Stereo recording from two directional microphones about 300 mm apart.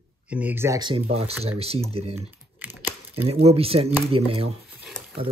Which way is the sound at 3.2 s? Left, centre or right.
Centre.